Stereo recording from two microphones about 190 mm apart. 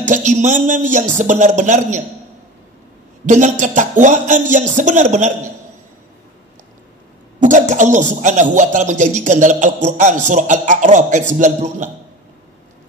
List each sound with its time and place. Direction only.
0.0 s speech: 40° right (ahead or behind)
3.3 s speech: 40° right (ahead or behind)
7.3 s speech: 40° right (ahead or behind)